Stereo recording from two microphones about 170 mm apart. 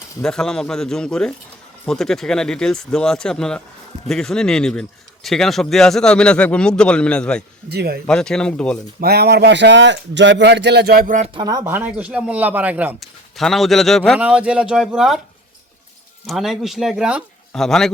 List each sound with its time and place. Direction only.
0.2 s speech: 5° left (ahead or behind)
7.7 s speech: 70° right (ahead or behind)
8.0 s speech: 5° left (ahead or behind)
9.0 s speech: 70° right (ahead or behind); by 11.3 s 50° right (ahead or behind)
11.3 s speech: 25° right (ahead or behind)
11.7 s speech: 10° right (ahead or behind)
13.0 s speech: centre (ahead or behind)
16.2 s speech: centre (ahead or behind)